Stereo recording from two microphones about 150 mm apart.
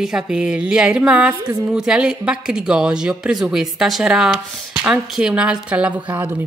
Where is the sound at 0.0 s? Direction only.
5° right (ahead or behind).